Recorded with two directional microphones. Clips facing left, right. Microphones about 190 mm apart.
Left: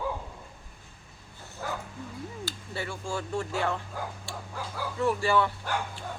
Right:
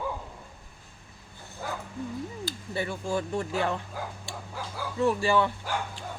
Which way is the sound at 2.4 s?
20° right (ahead or behind).